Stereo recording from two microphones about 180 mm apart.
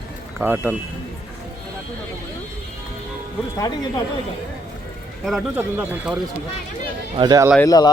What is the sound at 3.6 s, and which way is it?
Speech, 20° left (ahead or behind).